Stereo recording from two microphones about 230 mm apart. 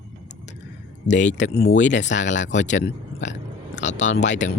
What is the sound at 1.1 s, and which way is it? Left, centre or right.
Speech, left.